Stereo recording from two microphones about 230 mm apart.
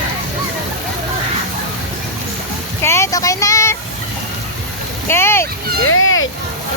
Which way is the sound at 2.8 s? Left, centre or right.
Centre.